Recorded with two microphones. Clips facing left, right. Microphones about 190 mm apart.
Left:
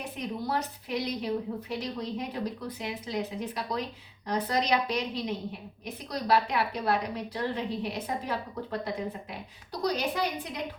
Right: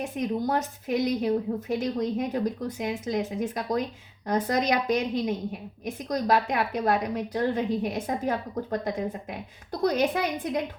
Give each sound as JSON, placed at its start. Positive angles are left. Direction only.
{"t": 0.2, "sound": "a woman's voice", "side_deg": -45}